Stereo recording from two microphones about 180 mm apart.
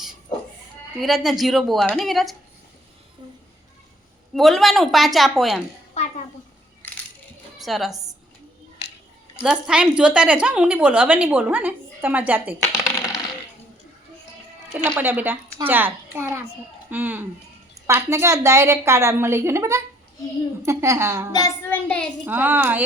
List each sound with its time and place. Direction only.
1.0 s a woman's voice: centre (ahead or behind)
4.4 s a woman's voice: centre (ahead or behind)
7.6 s a woman's voice: centre (ahead or behind)
9.4 s a woman's voice: 5° right (ahead or behind)
14.8 s a woman's voice: 10° right (ahead or behind)
21.3 s child singing: 15° left (ahead or behind)
22.3 s a woman's voice: 10° right (ahead or behind)